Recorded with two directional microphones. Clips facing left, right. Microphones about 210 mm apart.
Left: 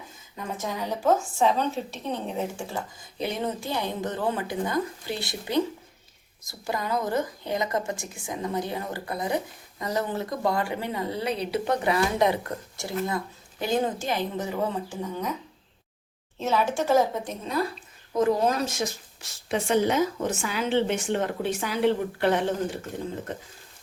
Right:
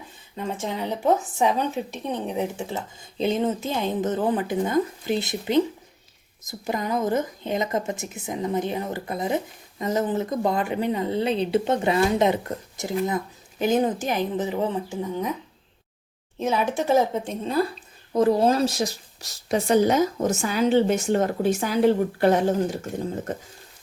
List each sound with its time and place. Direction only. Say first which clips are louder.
0.3 s a woman's voice: right 3 dB; 25° right (ahead or behind)
16.4 s a woman's voice: right 1 dB; 20° right (ahead or behind); by 22.8 s 40° right (ahead or behind)